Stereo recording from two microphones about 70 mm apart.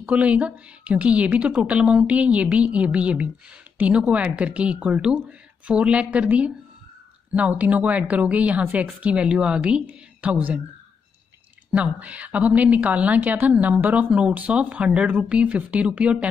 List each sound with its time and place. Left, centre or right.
0.0 s a woman's voice: centre
11.7 s a woman's voice: centre